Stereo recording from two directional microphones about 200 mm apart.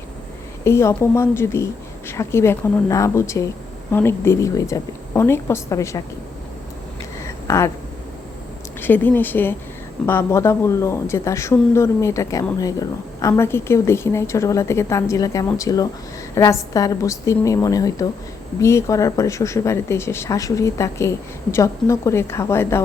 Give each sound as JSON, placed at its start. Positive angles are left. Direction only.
{"t": 0.6, "sound": "speech", "side_deg": 15}
{"t": 7.2, "sound": "a sound", "side_deg": 15}
{"t": 8.8, "sound": "speech", "side_deg": 10}